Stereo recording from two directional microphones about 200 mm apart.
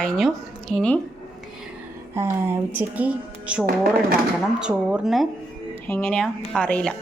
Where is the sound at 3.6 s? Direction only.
50° right (ahead or behind).